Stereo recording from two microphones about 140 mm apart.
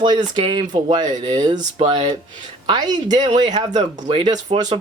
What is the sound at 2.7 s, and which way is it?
Speech, 30° right (ahead or behind).